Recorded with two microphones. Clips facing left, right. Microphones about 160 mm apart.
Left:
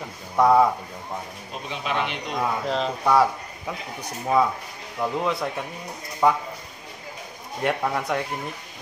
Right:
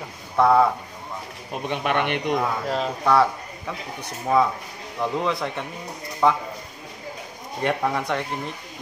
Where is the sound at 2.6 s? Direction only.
5° right (ahead or behind).